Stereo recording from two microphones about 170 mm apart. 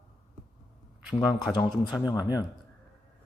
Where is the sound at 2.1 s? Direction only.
20° left (ahead or behind).